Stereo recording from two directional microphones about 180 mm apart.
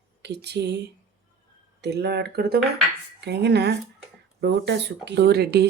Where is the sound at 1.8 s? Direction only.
65° right (ahead or behind).